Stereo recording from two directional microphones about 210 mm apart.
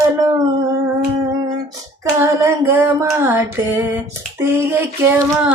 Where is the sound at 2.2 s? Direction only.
15° right (ahead or behind).